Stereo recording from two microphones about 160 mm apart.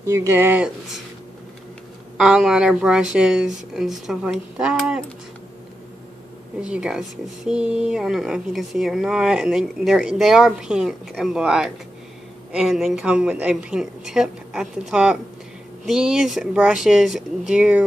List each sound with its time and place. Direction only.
0.0 s speech: 15° right (ahead or behind)
2.1 s speech: 5° right (ahead or behind)
6.6 s speech: 5° right (ahead or behind)